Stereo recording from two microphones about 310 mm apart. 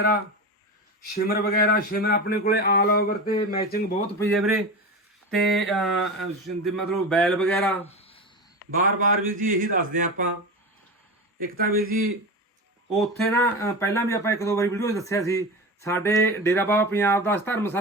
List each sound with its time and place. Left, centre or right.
1.1 s speech: left
4.2 s a man's voice: centre
7.9 s a sound: centre
8.8 s speech: right
11.3 s speech: right
12.9 s speech: centre